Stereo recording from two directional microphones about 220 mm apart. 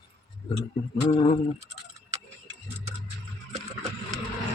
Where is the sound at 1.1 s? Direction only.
25° left (ahead or behind).